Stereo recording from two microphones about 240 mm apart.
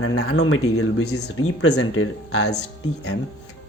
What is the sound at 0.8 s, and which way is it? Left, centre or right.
Speech, left.